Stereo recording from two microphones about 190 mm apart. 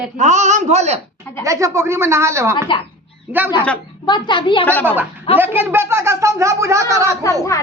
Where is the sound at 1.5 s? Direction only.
15° right (ahead or behind).